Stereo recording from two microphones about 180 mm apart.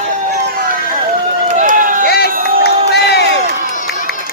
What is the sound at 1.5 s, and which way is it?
Run, 45° right (ahead or behind).